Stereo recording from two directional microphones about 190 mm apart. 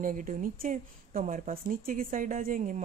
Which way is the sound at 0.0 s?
45° right (ahead or behind).